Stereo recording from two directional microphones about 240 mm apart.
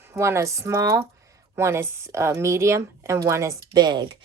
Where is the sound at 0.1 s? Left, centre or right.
Centre.